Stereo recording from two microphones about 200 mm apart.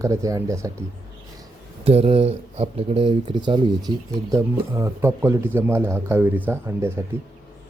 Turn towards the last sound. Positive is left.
turn(degrees=-10)  # may be behind; listen again after turning